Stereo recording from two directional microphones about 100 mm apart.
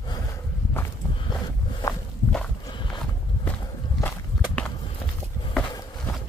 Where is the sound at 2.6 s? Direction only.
50° left (ahead or behind).